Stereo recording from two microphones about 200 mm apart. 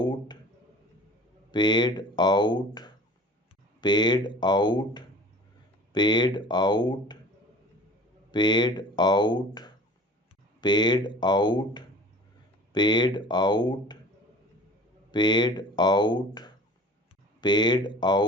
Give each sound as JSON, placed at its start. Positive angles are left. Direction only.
{"t": 0.0, "sound": "a sound", "side_deg": 20}
{"t": 1.5, "sound": "speech", "side_deg": 20}
{"t": 8.3, "sound": "speech", "side_deg": 20}
{"t": 15.1, "sound": "speech", "side_deg": 20}